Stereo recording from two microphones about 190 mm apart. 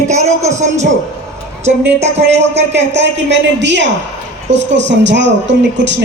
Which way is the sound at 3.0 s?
70° right (ahead or behind).